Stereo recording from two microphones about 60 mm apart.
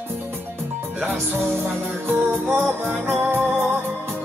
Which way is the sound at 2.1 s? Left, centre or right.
Right.